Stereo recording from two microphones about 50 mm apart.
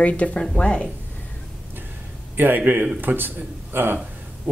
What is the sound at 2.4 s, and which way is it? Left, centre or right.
Speech, right.